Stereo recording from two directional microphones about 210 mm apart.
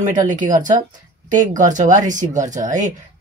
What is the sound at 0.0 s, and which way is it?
Speech, 40° right (ahead or behind).